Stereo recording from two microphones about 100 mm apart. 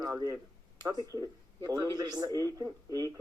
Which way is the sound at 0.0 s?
35° right (ahead or behind).